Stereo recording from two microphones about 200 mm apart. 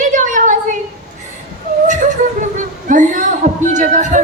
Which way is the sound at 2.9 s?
40° right (ahead or behind).